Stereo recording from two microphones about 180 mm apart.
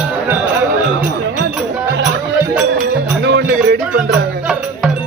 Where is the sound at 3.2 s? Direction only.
75° right (ahead or behind).